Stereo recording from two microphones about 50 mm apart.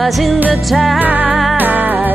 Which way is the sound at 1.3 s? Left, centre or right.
Centre.